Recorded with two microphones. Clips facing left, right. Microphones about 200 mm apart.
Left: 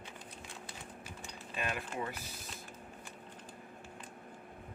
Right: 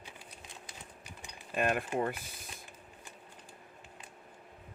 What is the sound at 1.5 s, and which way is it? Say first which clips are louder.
Speech: right 8 dB; 50° right (ahead or behind).